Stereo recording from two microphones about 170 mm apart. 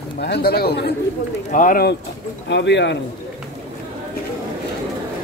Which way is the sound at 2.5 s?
90° left.